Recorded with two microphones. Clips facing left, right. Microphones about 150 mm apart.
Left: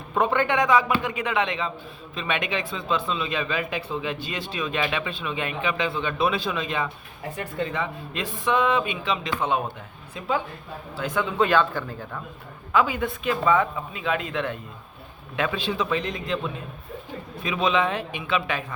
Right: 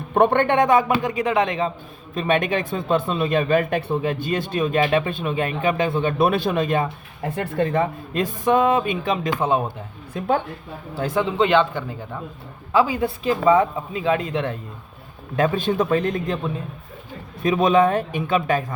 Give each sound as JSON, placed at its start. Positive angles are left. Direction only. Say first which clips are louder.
{"t": 0.1, "sound": "speech", "louder": "right 5 dB", "side_deg": -60}
{"t": 10.2, "sound": "a woman's voice", "louder": "right 5 dB", "side_deg": -55}
{"t": 10.9, "sound": "speech", "louder": "right 4 dB", "side_deg": -35}
{"t": 12.7, "sound": "speech", "louder": "right 4 dB", "side_deg": -35}
{"t": 15.4, "sound": "speech", "louder": "right 6 dB", "side_deg": -45}
{"t": 17.4, "sound": "speech", "louder": "right 7 dB", "side_deg": -45}